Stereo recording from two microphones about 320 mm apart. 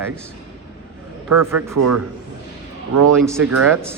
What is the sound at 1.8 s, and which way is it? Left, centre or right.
Speech, right.